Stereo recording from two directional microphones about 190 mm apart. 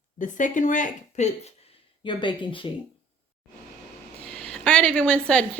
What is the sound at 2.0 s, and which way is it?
Speech, 25° left (ahead or behind).